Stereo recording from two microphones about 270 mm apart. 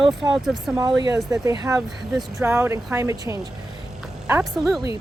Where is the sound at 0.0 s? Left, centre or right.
Centre.